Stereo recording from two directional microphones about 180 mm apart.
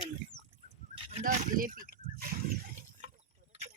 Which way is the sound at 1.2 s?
50° right (ahead or behind).